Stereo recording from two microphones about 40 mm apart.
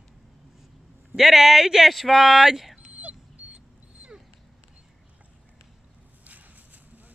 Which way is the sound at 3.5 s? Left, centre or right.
Right.